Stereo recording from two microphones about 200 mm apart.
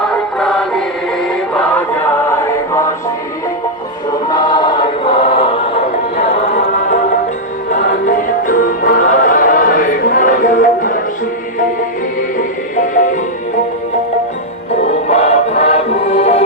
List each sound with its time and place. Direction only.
0.3 s music: centre (ahead or behind)
4.3 s choir: 20° left (ahead or behind)
7.9 s music: 45° left (ahead or behind)
15.1 s music: 30° left (ahead or behind)